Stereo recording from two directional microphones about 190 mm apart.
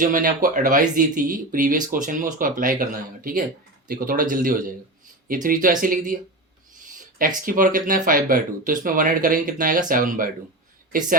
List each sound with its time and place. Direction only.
0.0 s speech: 45° right (ahead or behind)